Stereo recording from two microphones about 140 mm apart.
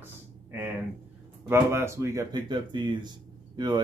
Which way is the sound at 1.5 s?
20° right (ahead or behind).